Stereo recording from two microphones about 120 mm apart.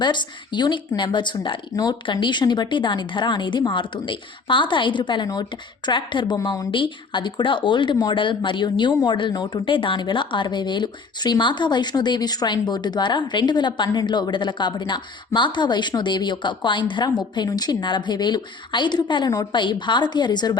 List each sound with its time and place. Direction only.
0.0 s speech: 40° left (ahead or behind)